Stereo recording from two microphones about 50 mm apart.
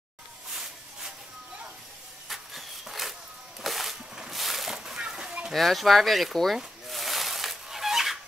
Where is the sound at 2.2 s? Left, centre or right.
Centre.